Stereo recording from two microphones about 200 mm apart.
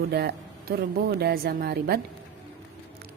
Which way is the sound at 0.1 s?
55° right (ahead or behind).